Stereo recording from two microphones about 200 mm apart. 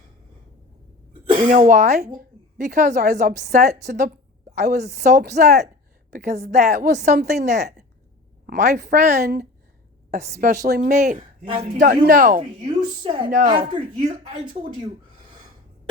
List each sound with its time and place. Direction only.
1.4 s a woman's voice: 40° right (ahead or behind)
5.2 s speech: 55° right (ahead or behind)
6.2 s speech: 35° right (ahead or behind)
12.6 s a woman's voice: 25° right (ahead or behind)